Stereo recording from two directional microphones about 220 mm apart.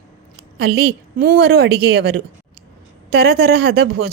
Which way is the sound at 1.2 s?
45° right (ahead or behind).